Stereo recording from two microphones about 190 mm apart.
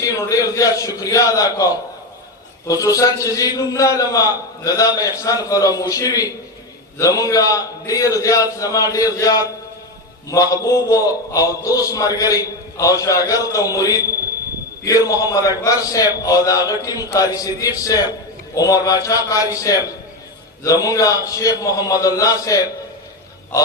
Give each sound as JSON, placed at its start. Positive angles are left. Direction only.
{"t": 0.0, "sound": "mantra", "side_deg": 15}
{"t": 14.8, "sound": "a man's voice", "side_deg": 20}
{"t": 18.5, "sound": "mantra", "side_deg": 20}